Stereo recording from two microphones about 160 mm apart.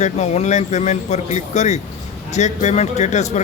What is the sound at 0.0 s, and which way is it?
A man's voice, 45° left (ahead or behind).